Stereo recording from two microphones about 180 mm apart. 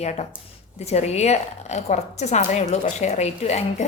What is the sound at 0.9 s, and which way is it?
A woman's voice, 35° left (ahead or behind).